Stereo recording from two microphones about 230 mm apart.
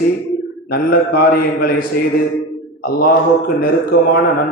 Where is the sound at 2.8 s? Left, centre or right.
Left.